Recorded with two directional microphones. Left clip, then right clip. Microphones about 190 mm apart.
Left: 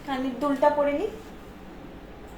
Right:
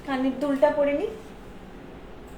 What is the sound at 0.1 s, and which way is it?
Speech, 10° right (ahead or behind).